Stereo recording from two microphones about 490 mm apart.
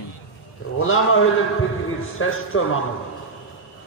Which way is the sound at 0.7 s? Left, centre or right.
Left.